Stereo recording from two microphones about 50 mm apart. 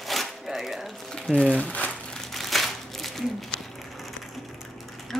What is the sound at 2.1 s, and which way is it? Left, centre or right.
Crumpling, centre.